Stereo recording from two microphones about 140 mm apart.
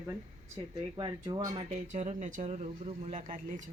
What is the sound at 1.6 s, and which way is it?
Speech, 45° right (ahead or behind).